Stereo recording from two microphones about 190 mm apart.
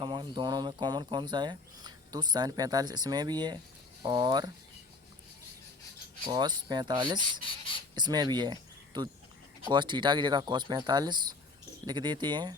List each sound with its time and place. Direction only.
0.0 s speech: 25° right (ahead or behind)
6.3 s speech: 25° right (ahead or behind)